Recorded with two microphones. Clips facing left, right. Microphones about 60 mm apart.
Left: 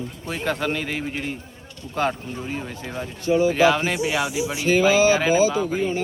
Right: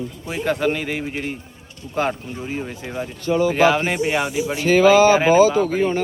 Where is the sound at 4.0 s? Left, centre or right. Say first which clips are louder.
Right 3 dB; right.